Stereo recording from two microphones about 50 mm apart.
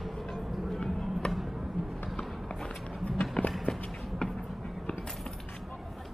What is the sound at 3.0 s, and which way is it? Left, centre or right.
Run, left.